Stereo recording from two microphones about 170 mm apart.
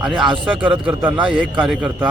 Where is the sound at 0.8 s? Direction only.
5° right (ahead or behind).